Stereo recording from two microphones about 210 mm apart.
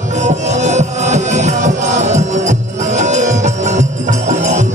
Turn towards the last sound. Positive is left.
turn(degrees=-35)  # may be behind; listen again after turning